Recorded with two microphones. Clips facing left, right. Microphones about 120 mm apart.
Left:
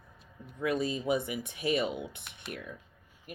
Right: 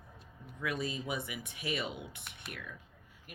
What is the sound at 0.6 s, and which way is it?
Speech, 25° left (ahead or behind).